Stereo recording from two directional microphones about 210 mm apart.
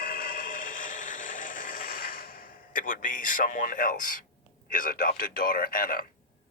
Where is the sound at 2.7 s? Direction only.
40° left (ahead or behind).